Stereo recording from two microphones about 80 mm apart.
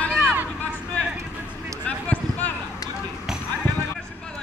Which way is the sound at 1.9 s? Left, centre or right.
Centre.